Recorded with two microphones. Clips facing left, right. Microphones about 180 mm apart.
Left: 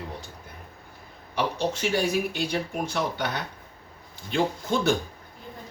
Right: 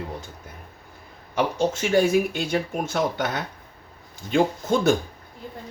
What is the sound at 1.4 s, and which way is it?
Speech, 50° right (ahead or behind).